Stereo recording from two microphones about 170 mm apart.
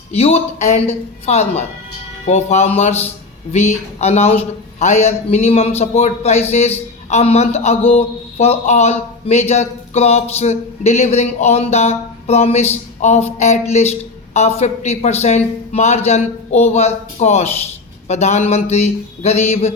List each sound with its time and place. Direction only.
0.1 s a man's voice: 35° left (ahead or behind)